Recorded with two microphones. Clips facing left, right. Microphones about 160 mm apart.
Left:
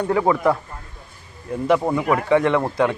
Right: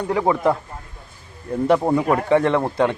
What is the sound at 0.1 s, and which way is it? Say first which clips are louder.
Speech: even; 20° right (ahead or behind).